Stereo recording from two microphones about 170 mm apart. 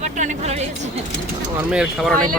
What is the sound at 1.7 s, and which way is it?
Speech, 5° right (ahead or behind).